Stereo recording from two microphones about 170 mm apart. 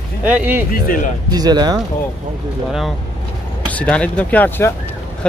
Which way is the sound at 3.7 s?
10° left (ahead or behind).